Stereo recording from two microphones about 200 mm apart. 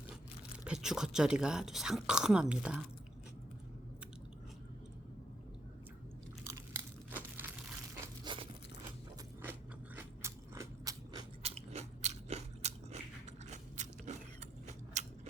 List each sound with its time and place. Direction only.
0.6 s speech: 5° right (ahead or behind)
7.1 s crumpling: 10° right (ahead or behind)
7.9 s crumpling: 20° right (ahead or behind)
9.4 s scrape: 10° right (ahead or behind)
11.4 s biting: 30° right (ahead or behind)
14.7 s a sound: 35° right (ahead or behind)